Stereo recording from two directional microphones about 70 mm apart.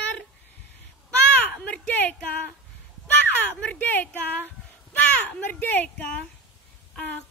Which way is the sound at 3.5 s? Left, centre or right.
Centre.